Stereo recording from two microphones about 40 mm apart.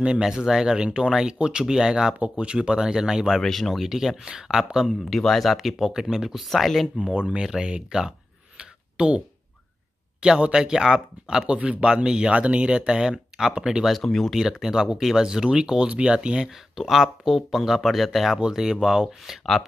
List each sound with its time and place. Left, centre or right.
0.2 s speech: centre
2.1 s speech: right; by 3.3 s centre
3.3 s speech: centre
3.8 s speech: centre
5.1 s speech: centre
7.0 s speech: right
8.5 s a sound: right
10.5 s speech: centre
13.8 s speech: centre
14.3 s speech: centre
16.4 s speech: centre